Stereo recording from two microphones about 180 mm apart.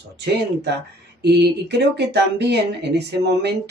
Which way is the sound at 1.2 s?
65° right (ahead or behind).